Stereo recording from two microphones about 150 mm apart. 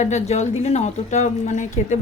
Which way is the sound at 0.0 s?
50° left (ahead or behind).